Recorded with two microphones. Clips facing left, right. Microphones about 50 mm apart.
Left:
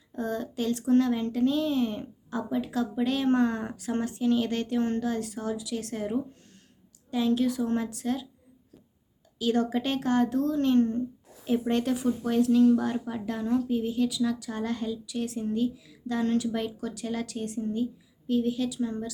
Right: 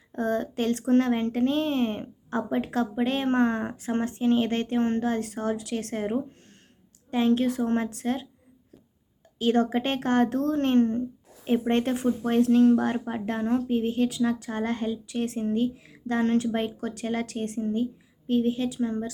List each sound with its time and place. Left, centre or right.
0.1 s speech: right
9.4 s speech: right